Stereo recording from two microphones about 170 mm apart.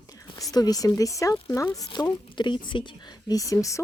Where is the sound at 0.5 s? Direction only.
20° left (ahead or behind).